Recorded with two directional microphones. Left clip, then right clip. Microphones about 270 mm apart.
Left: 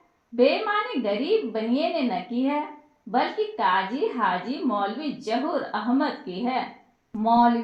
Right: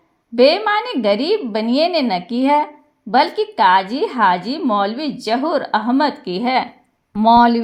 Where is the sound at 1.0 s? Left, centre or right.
Right.